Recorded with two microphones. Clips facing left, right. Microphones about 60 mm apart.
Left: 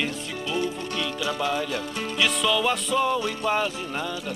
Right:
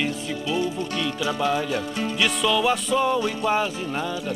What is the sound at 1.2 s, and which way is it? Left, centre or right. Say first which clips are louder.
Music: right 3 dB; centre.